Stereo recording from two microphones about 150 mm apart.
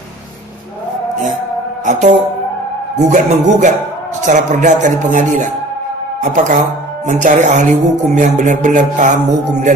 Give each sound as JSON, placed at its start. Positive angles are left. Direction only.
{"t": 1.9, "sound": "a man's voice", "side_deg": -55}
{"t": 4.2, "sound": "music", "side_deg": -55}